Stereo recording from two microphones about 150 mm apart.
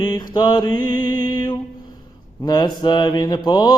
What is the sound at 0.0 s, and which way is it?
Mantra, 30° left (ahead or behind).